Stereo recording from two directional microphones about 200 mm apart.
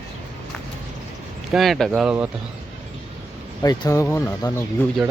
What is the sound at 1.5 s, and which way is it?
Speech, centre (ahead or behind).